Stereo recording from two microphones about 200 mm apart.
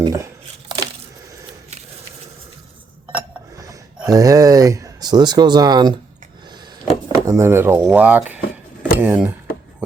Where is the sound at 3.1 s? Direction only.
15° right (ahead or behind).